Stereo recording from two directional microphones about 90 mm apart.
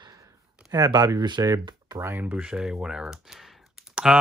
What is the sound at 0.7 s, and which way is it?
Speech, 45° right (ahead or behind).